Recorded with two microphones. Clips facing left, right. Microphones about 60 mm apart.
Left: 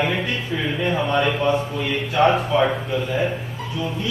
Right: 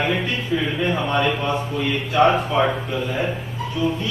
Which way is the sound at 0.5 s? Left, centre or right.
Centre.